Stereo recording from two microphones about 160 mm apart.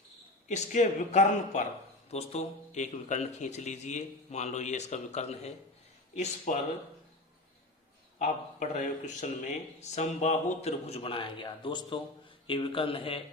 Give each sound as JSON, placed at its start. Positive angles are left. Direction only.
{"t": 0.4, "sound": "speech", "side_deg": 50}
{"t": 2.0, "sound": "speech", "side_deg": 40}
{"t": 6.1, "sound": "speech", "side_deg": 55}
{"t": 8.2, "sound": "speech", "side_deg": 50}